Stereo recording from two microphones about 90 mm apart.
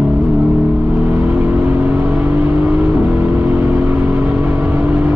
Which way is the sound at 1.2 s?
20° right (ahead or behind).